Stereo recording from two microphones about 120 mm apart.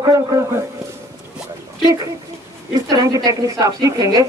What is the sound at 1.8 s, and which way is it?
A woman's voice, 30° right (ahead or behind).